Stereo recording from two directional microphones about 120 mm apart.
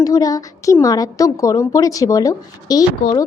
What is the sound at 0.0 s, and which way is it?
A woman's voice, 30° left (ahead or behind).